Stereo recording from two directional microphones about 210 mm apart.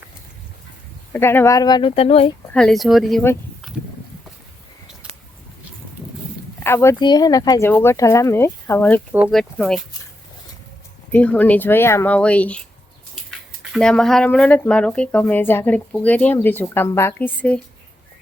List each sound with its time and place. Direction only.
1.1 s speech: 10° left (ahead or behind); by 2.3 s 30° left (ahead or behind)
2.5 s speech: 5° left (ahead or behind)
6.6 s speech: 10° left (ahead or behind)
9.1 s speech: 5° right (ahead or behind)
11.1 s speech: 5° left (ahead or behind)